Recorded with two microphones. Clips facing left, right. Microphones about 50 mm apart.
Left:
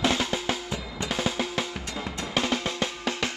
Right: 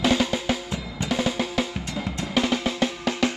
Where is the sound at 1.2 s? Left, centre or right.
Centre.